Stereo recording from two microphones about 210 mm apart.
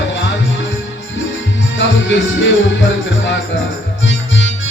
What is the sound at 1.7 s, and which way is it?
Music, 60° left (ahead or behind).